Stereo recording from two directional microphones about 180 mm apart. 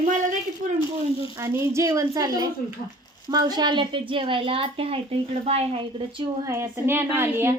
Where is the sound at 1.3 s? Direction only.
15° right (ahead or behind).